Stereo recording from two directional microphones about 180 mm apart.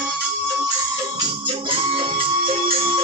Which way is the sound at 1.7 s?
30° right (ahead or behind).